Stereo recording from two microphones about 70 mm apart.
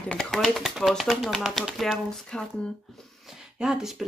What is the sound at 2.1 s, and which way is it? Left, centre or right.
Speech, centre.